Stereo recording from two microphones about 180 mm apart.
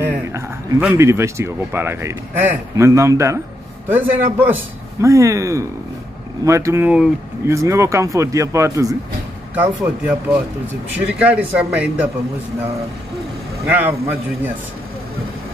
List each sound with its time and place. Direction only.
0.0 s speech: 10° right (ahead or behind)
13.7 s speech: 10° right (ahead or behind)